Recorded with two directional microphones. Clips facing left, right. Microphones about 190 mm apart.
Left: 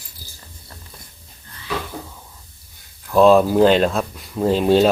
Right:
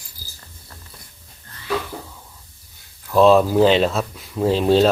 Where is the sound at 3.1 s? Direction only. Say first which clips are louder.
Left 1 dB; 5° left (ahead or behind).